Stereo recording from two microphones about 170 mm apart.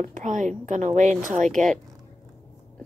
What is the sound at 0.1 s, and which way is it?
A woman's voice, 45° right (ahead or behind).